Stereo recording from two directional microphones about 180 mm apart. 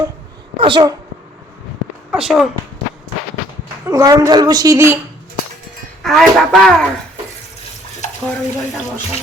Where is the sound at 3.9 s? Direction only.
15° right (ahead or behind).